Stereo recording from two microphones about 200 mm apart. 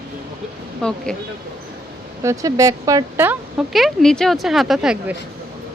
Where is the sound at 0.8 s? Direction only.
5° left (ahead or behind).